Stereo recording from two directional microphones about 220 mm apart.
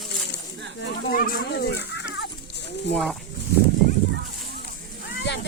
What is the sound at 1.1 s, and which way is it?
Chicken, 40° left (ahead or behind).